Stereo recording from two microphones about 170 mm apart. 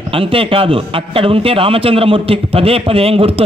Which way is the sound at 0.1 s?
30° right (ahead or behind).